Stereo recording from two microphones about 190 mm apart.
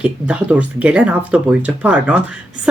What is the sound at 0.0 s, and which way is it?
A woman's voice, 5° right (ahead or behind).